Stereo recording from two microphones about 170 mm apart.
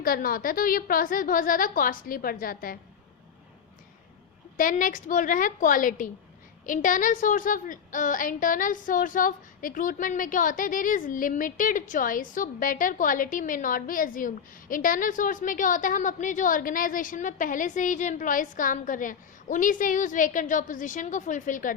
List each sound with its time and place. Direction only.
0.0 s a woman's voice: 60° left (ahead or behind)
4.5 s a woman's voice: 50° left (ahead or behind)